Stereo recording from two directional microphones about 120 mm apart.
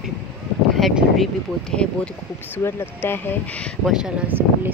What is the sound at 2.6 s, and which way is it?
Speech, 20° left (ahead or behind).